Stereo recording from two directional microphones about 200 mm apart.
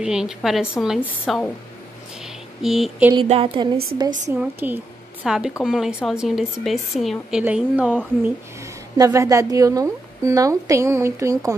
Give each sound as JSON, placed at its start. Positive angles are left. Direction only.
{"t": 0.0, "sound": "speech", "side_deg": -5}
{"t": 2.2, "sound": "a sound", "side_deg": 0}
{"t": 3.2, "sound": "a woman's voice", "side_deg": -30}